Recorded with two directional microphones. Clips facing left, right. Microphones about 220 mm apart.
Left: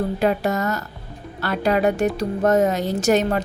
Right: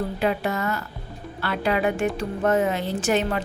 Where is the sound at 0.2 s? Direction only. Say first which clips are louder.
Left 3 dB; 45° left (ahead or behind).